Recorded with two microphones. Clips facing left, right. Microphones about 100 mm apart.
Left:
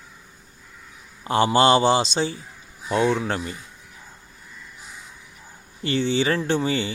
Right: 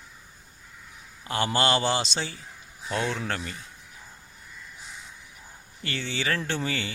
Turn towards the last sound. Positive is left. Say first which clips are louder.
# left 7 dB
turn(degrees=25)  # may be behind; listen again after turning